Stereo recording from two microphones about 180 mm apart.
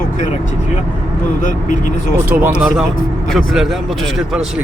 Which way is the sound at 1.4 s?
45° left (ahead or behind).